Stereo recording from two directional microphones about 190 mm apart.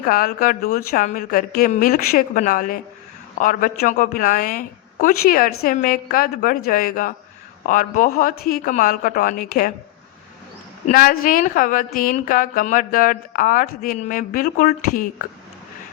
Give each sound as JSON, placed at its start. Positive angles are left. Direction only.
{"t": 0.0, "sound": "a woman's voice", "side_deg": 50}
{"t": 10.8, "sound": "a woman's voice", "side_deg": 50}